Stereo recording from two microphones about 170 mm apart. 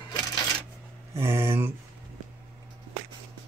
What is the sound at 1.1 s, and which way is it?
Speech, 15° right (ahead or behind).